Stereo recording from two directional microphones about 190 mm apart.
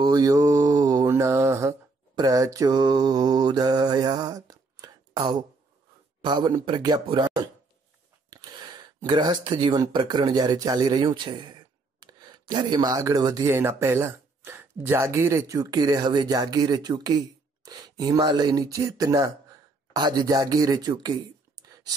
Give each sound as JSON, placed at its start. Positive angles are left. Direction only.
{"t": 0.0, "sound": "mantra", "side_deg": -20}
{"t": 6.2, "sound": "speech", "side_deg": -25}